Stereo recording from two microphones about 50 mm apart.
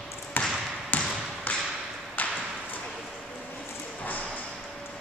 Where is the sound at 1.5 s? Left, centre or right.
Left.